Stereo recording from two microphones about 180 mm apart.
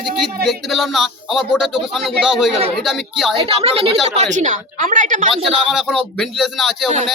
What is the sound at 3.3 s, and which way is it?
Speech, 30° right (ahead or behind).